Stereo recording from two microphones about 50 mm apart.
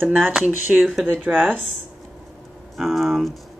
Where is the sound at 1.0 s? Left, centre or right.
Right.